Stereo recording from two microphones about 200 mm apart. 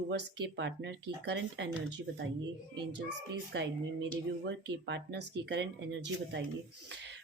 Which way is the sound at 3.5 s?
65° right (ahead or behind).